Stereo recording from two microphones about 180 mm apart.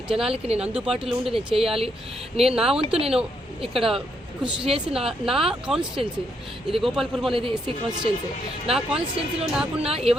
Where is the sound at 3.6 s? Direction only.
30° right (ahead or behind).